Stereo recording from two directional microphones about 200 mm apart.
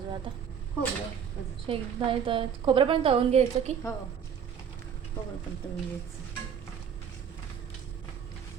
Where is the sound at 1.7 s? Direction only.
25° right (ahead or behind).